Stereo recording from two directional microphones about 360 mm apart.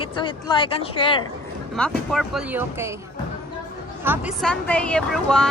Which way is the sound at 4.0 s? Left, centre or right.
Centre.